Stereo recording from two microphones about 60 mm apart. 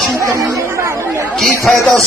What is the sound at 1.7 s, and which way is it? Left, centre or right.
Speech, centre.